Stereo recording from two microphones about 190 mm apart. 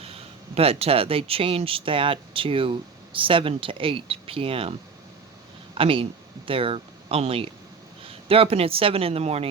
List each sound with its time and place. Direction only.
0.5 s speech: 30° right (ahead or behind)
5.7 s speech: 30° right (ahead or behind)